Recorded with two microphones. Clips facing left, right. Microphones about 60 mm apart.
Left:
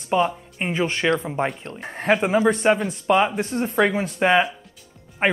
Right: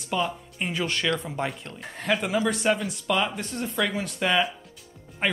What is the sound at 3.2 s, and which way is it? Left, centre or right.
Speech, left.